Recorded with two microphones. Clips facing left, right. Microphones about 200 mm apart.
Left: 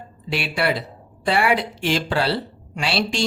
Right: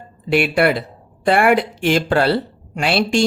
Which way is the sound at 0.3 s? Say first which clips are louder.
Right 7 dB; 55° right (ahead or behind).